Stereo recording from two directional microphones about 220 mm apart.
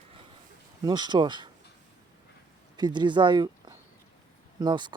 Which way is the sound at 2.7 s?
20° right (ahead or behind).